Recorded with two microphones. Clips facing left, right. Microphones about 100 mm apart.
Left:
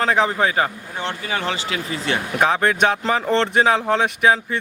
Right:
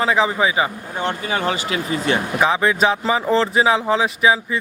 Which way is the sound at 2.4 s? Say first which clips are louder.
Even; centre (ahead or behind).